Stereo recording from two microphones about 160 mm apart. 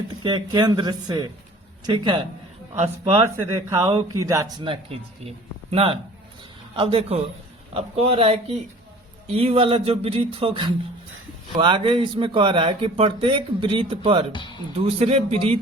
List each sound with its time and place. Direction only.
0.2 s speech: 30° right (ahead or behind)
2.7 s speech: 45° right (ahead or behind)
3.5 s speech: 20° right (ahead or behind)
4.5 s speech: 35° right (ahead or behind)
14.3 s speech: 30° left (ahead or behind)
14.8 s speech: 40° right (ahead or behind)